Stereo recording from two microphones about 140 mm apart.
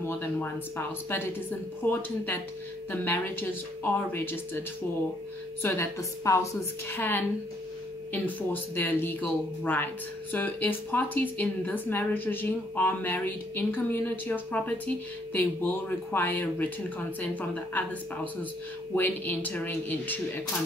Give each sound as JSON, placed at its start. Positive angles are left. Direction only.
{"t": 0.0, "sound": "a woman's voice", "side_deg": 15}
{"t": 5.6, "sound": "a woman's voice", "side_deg": 20}